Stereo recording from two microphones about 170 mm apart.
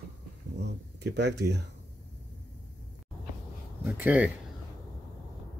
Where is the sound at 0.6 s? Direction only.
85° right.